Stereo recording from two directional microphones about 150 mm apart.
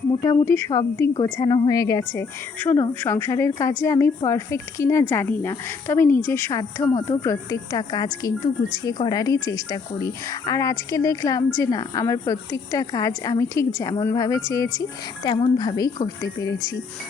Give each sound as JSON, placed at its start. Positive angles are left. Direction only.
{"t": 0.2, "sound": "a woman's voice", "side_deg": 25}
{"t": 1.2, "sound": "speech", "side_deg": 30}